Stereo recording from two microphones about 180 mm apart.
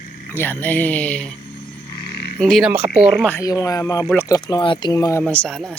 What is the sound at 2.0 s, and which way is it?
Frog, 60° left (ahead or behind).